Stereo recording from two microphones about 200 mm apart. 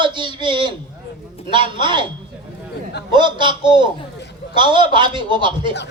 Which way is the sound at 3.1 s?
25° right (ahead or behind).